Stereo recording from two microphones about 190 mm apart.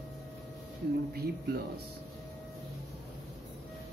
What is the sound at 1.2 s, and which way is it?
Speech, 55° right (ahead or behind).